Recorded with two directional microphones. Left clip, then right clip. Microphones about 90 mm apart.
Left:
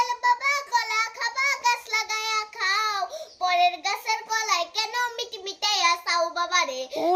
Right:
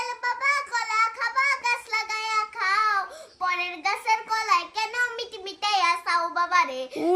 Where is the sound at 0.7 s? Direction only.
35° right (ahead or behind).